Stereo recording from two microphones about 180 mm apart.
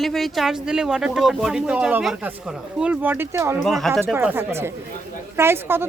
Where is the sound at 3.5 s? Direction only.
Centre (ahead or behind).